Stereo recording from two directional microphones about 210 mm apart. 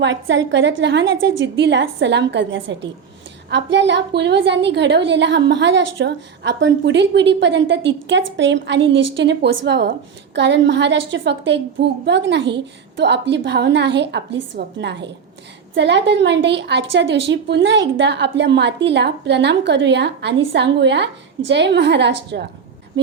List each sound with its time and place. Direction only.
0.0 s a woman's voice: 60° right (ahead or behind)